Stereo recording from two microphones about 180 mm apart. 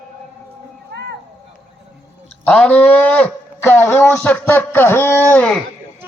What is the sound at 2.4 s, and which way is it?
Speech, 10° left (ahead or behind).